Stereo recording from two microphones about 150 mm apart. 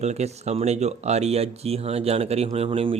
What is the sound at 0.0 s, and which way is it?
Speech, 45° right (ahead or behind).